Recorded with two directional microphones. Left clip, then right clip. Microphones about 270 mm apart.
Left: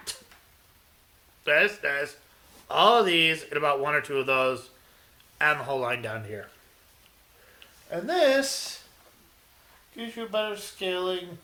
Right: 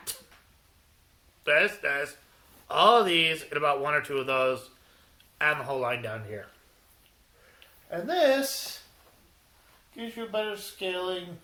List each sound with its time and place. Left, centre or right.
1.5 s speech: left
7.9 s speech: left
9.9 s speech: left